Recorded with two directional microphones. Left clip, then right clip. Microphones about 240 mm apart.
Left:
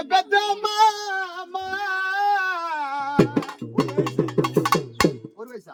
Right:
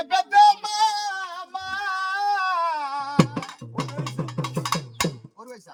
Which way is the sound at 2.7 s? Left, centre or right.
Centre.